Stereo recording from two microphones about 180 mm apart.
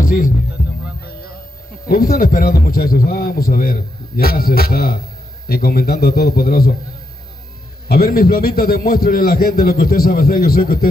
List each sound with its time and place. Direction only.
1.9 s a man's voice: 55° left (ahead or behind)
7.9 s a man's voice: 55° left (ahead or behind)